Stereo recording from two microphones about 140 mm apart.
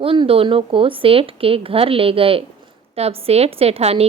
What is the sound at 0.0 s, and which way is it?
A woman's voice, 40° right (ahead or behind).